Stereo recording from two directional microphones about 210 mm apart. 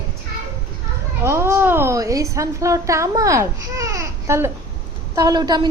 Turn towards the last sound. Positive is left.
turn(degrees=-20)  # may be behind; listen again after turning